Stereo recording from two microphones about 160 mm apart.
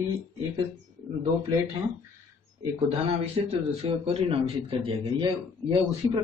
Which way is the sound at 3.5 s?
35° right (ahead or behind).